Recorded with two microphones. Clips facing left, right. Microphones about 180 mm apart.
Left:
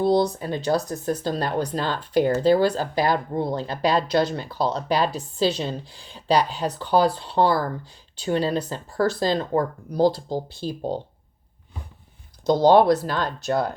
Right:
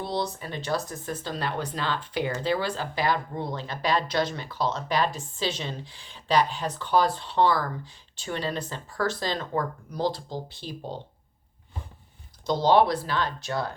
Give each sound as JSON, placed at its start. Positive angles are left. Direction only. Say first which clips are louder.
{"t": 0.0, "sound": "speech", "louder": "left 10 dB", "side_deg": 40}
{"t": 12.5, "sound": "speech", "louder": "left 5 dB", "side_deg": 45}